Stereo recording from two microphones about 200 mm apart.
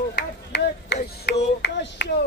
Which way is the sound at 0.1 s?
55° left (ahead or behind).